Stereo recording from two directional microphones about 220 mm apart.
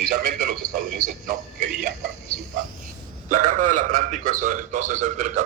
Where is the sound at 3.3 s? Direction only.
35° right (ahead or behind).